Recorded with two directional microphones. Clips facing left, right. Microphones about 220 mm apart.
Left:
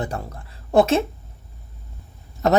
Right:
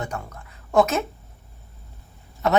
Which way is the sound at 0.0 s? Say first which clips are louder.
Left 3 dB; 35° left (ahead or behind).